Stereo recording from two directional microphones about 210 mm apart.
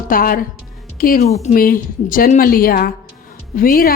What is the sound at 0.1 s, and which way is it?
Speech, 45° left (ahead or behind).